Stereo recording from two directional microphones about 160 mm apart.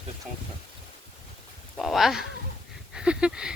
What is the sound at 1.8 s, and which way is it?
Speech, centre (ahead or behind).